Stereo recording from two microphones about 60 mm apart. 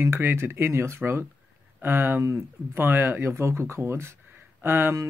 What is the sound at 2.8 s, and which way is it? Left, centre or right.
Speech, right.